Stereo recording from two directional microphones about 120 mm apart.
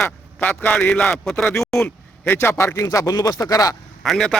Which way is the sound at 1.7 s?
10° left (ahead or behind).